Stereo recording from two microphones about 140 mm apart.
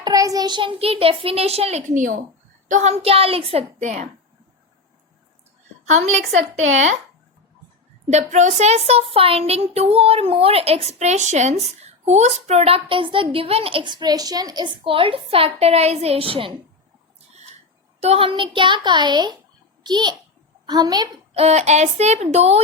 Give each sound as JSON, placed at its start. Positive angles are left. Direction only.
{"t": 0.0, "sound": "speech", "side_deg": -25}
{"t": 5.8, "sound": "a woman's voice", "side_deg": -55}
{"t": 8.1, "sound": "a woman's voice", "side_deg": -60}
{"t": 18.0, "sound": "a woman's voice", "side_deg": -45}
{"t": 21.3, "sound": "speech", "side_deg": -50}